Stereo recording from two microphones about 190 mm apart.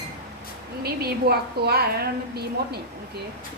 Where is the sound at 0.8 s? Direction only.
55° right (ahead or behind).